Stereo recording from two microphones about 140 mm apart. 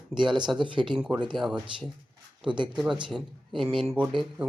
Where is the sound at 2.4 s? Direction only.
35° right (ahead or behind).